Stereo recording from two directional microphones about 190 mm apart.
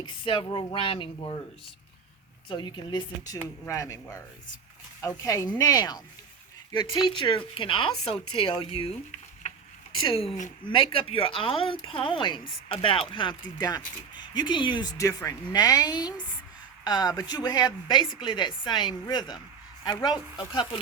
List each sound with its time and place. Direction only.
0.0 s speech: 25° left (ahead or behind)
2.5 s speech: 25° left (ahead or behind)
10.2 s speech: 35° left (ahead or behind)